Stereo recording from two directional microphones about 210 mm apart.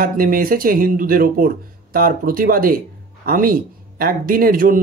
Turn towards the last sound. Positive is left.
turn(degrees=-40)  # may be behind; listen again after turning